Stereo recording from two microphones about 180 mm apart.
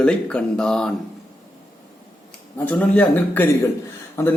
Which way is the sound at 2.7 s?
10° left (ahead or behind).